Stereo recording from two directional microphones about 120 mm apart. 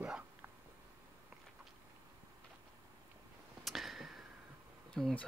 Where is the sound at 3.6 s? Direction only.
Centre (ahead or behind).